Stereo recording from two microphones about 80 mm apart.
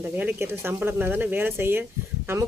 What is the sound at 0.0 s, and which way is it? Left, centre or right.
Speech, right.